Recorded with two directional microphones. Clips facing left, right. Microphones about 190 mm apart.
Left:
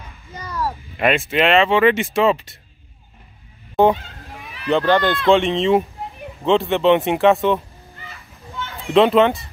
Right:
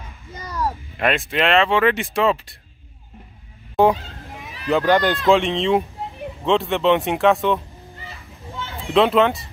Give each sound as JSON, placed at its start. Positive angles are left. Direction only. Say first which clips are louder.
{"t": 0.9, "sound": "speech", "louder": "left 4 dB", "side_deg": 5}
{"t": 3.8, "sound": "speech", "louder": "left 1 dB", "side_deg": 0}
{"t": 4.8, "sound": "speech", "louder": "right 1 dB", "side_deg": -15}
{"t": 5.3, "sound": "speech", "louder": "left 2 dB", "side_deg": 0}
{"t": 8.0, "sound": "children playing", "louder": "even", "side_deg": -35}
{"t": 8.9, "sound": "speech", "louder": "left 2 dB", "side_deg": 0}